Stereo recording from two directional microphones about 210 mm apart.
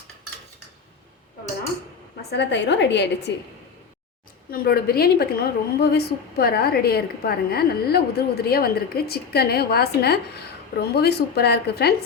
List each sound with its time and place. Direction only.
2.3 s a woman's voice: 55° left (ahead or behind)
4.5 s a woman's voice: 45° left (ahead or behind)